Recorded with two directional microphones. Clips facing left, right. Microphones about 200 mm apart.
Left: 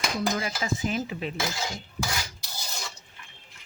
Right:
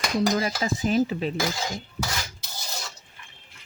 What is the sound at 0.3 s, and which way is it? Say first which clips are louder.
Speech: right 4 dB; 35° right (ahead or behind).